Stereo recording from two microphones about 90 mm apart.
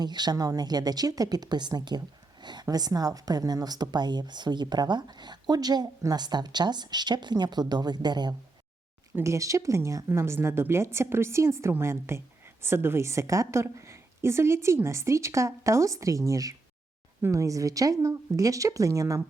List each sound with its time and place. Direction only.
0.0 s a woman's voice: 50° right (ahead or behind)
9.1 s a woman's voice: 35° right (ahead or behind)